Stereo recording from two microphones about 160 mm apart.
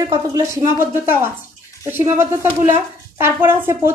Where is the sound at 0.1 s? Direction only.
20° right (ahead or behind).